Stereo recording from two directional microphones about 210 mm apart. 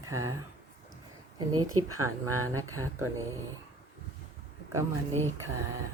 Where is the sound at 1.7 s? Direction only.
90° right.